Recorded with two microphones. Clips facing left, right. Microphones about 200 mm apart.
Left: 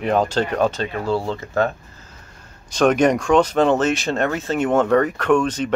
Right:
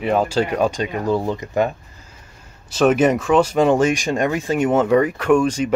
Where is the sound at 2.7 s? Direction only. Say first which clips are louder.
Right 1 dB; 5° right (ahead or behind).